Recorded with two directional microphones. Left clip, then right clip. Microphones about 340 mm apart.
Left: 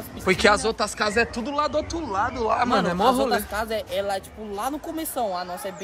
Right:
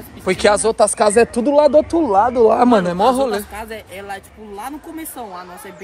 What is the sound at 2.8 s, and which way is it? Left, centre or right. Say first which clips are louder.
Speech: right 5 dB; centre.